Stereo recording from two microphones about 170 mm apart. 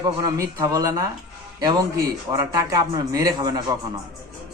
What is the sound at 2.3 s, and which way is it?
A man's voice, 20° right (ahead or behind).